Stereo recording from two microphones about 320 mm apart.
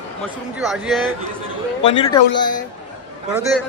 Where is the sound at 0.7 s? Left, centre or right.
Centre.